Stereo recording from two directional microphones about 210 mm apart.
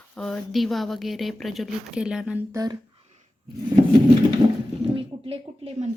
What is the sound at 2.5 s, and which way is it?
Speech, 15° right (ahead or behind).